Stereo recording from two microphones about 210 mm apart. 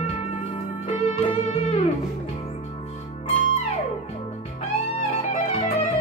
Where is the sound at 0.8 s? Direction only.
30° left (ahead or behind).